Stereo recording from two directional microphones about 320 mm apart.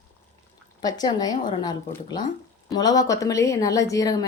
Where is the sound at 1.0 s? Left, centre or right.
Centre.